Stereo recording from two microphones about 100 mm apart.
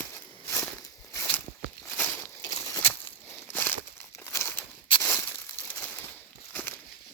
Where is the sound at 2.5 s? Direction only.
35° left (ahead or behind).